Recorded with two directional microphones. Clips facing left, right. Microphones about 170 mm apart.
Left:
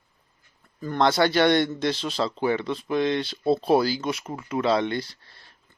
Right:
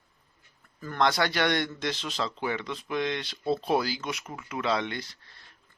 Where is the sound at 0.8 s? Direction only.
25° left (ahead or behind).